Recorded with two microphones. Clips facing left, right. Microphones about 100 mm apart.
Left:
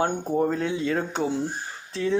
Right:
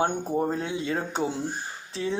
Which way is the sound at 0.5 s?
25° right (ahead or behind).